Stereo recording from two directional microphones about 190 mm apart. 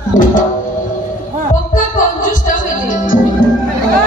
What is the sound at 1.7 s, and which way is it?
Music, 45° left (ahead or behind).